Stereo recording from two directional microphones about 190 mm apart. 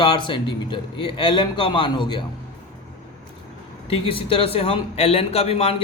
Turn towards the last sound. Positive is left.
turn(degrees=30)  # may be behind; listen again after turning